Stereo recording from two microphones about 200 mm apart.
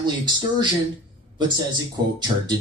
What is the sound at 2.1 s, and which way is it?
Speech, 20° right (ahead or behind).